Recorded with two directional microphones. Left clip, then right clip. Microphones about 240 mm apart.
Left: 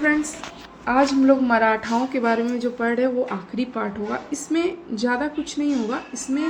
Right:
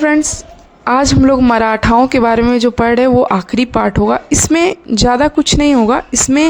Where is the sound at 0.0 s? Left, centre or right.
Right.